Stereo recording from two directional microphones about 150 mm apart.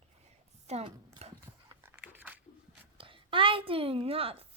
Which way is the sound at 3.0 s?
35° right (ahead or behind).